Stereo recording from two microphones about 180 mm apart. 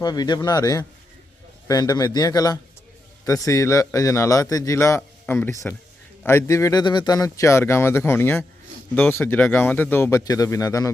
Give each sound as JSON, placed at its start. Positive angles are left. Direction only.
{"t": 0.0, "sound": "a man's voice", "side_deg": 20}